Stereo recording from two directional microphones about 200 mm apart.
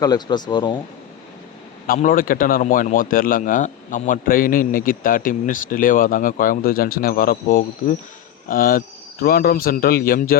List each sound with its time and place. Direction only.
0.0 s speech: 20° left (ahead or behind)
1.9 s a man's voice: 45° left (ahead or behind)